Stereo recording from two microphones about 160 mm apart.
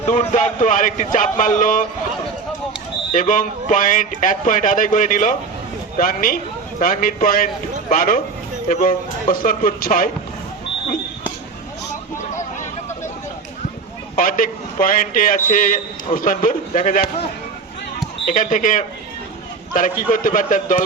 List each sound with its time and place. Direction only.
0.1 s speech: 45° left (ahead or behind)
3.1 s a man's voice: 55° left (ahead or behind)
14.2 s a man's voice: 60° left (ahead or behind)
18.3 s a man's voice: 55° left (ahead or behind)